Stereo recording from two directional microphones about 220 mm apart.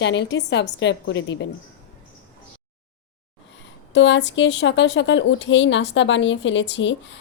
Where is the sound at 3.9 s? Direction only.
55° left (ahead or behind).